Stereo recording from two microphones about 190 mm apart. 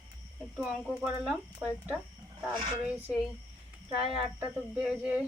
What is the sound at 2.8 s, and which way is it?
Speech, 10° right (ahead or behind).